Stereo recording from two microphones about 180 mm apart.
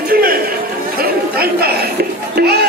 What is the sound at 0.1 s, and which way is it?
Chatter, 55° right (ahead or behind).